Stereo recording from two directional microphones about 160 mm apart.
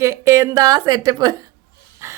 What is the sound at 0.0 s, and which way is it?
A woman's voice, 20° right (ahead or behind).